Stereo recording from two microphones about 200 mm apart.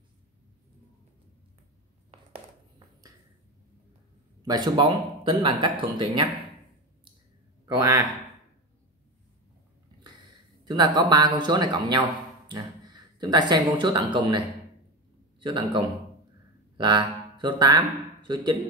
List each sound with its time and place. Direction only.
4.4 s speech: 20° right (ahead or behind)
7.6 s a man's voice: 15° right (ahead or behind)
10.6 s speech: 20° right (ahead or behind)
15.4 s speech: 25° right (ahead or behind)